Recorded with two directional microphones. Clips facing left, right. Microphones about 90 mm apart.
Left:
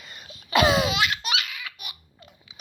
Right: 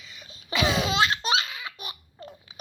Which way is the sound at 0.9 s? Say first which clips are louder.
Right 2 dB; 30° right (ahead or behind).